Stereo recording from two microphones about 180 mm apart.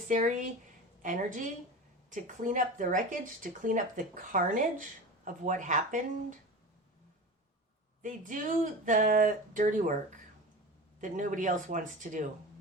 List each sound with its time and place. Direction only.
0.1 s speech: 45° right (ahead or behind)
8.0 s speech: 45° right (ahead or behind)
11.0 s speech: 45° right (ahead or behind)